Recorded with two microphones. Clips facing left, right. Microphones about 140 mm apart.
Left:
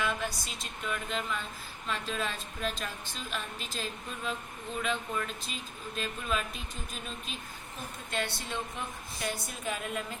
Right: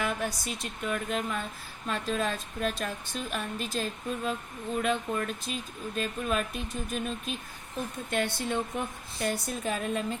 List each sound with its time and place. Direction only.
0.0 s speech: 50° right (ahead or behind)
9.2 s a woman's voice: 40° right (ahead or behind)